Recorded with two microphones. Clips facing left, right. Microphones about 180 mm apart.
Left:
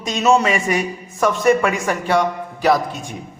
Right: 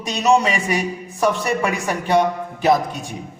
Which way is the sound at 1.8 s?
20° right (ahead or behind).